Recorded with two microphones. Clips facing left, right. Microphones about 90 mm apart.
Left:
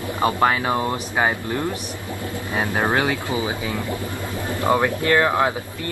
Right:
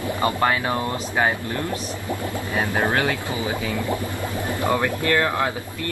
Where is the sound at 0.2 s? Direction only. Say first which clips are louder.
Left 3 dB; 15° left (ahead or behind).